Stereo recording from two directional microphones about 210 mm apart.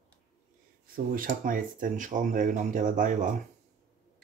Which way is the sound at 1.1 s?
40° right (ahead or behind).